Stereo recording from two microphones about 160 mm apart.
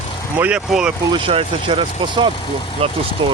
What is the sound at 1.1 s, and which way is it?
Speech, 35° right (ahead or behind).